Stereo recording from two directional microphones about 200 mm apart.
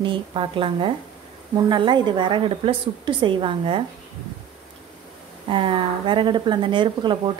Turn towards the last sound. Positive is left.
turn(degrees=-25)  # may be behind; listen again after turning